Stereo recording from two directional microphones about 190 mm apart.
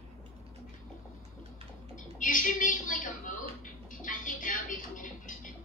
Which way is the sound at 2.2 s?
45° left (ahead or behind).